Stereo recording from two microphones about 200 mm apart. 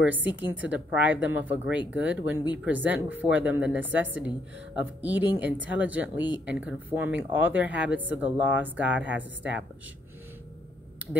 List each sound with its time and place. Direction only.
0.0 s a woman's voice: 10° right (ahead or behind)